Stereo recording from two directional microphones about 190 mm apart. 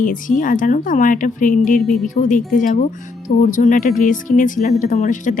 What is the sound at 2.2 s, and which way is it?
A woman's voice, 45° left (ahead or behind).